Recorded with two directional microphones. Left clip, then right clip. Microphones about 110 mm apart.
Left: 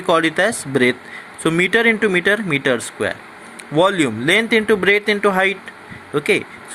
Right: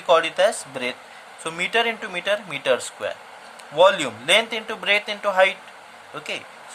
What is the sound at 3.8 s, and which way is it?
Speech, 40° left (ahead or behind).